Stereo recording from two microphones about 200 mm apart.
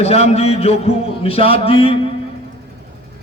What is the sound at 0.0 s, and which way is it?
Speech, 30° left (ahead or behind).